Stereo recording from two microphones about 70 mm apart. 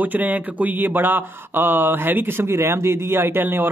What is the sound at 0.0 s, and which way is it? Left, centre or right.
A man's voice, right.